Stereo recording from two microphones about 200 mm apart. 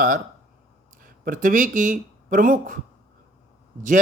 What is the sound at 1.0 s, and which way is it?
Speech, 45° right (ahead or behind).